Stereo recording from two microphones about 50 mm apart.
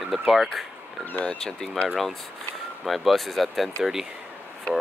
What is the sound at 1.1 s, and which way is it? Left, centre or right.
Speech, left.